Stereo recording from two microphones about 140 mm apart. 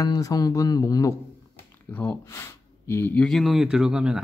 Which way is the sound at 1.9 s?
10° left (ahead or behind).